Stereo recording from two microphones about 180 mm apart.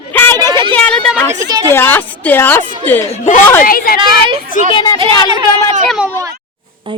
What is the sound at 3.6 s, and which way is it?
Speech, 55° left (ahead or behind).